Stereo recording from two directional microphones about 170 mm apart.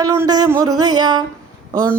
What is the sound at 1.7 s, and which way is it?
Speech, 20° right (ahead or behind).